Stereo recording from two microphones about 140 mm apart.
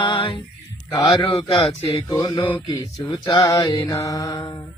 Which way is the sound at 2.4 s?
15° left (ahead or behind).